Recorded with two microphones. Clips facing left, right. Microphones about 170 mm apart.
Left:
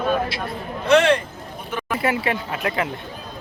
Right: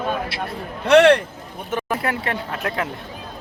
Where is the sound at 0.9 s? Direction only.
70° right (ahead or behind).